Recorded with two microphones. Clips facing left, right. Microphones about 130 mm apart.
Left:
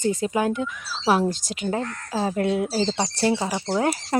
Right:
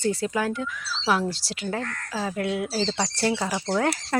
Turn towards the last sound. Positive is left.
turn(degrees=15)  # may be behind; listen again after turning